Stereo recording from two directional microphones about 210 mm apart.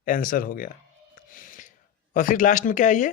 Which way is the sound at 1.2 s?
40° left (ahead or behind).